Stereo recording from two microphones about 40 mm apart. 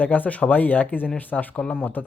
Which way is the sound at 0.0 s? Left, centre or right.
Left.